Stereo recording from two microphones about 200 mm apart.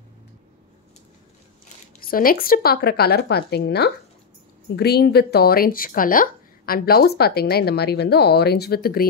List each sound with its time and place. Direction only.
2.0 s speech: 45° left (ahead or behind)